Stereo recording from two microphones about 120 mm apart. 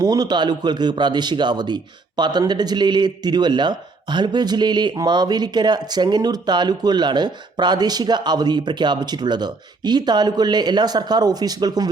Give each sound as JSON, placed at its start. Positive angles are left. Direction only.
{"t": 0.0, "sound": "speech", "side_deg": -35}